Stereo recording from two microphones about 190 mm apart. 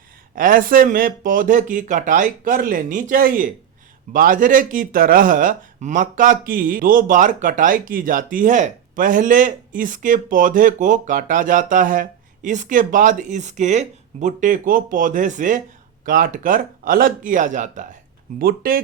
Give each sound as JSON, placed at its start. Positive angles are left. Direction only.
{"t": 0.3, "sound": "speech", "side_deg": -45}